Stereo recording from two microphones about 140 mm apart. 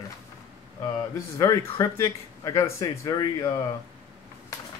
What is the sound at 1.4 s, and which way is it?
Speech, 20° left (ahead or behind).